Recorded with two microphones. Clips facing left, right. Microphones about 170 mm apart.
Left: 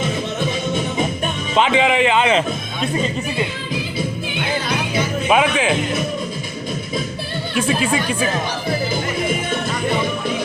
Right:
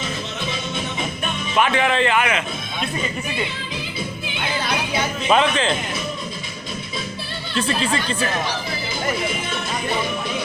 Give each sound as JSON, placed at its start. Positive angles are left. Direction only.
{"t": 0.3, "sound": "music", "side_deg": 45}
{"t": 1.5, "sound": "a man's voice", "side_deg": 20}
{"t": 5.3, "sound": "a man's voice", "side_deg": 10}
{"t": 7.5, "sound": "a man's voice", "side_deg": 10}